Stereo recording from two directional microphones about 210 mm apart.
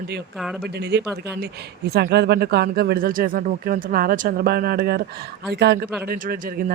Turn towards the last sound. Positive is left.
turn(degrees=-45)  # may be behind; listen again after turning